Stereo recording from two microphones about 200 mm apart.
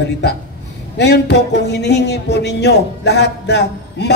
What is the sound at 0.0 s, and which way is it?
Speech, 55° left (ahead or behind).